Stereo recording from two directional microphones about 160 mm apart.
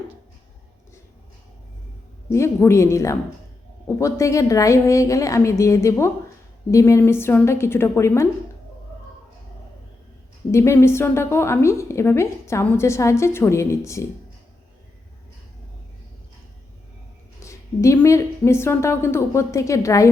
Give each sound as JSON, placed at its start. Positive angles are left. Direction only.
{"t": 2.3, "sound": "a woman's voice", "side_deg": 15}
{"t": 10.5, "sound": "a woman's voice", "side_deg": 15}
{"t": 17.4, "sound": "a woman's voice", "side_deg": 20}